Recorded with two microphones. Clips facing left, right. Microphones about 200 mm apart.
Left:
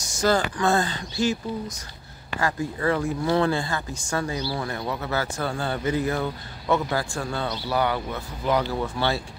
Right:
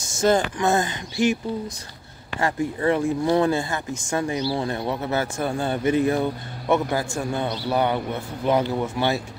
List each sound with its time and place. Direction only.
0.0 s speech: 25° right (ahead or behind)
2.4 s speech: 25° right (ahead or behind)